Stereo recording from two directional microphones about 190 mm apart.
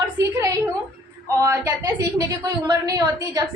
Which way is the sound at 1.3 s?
15° right (ahead or behind).